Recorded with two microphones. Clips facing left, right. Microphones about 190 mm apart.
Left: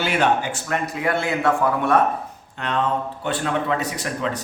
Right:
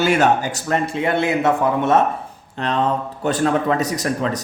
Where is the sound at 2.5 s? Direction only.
35° right (ahead or behind).